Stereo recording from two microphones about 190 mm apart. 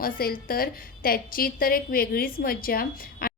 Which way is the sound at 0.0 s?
50° left (ahead or behind).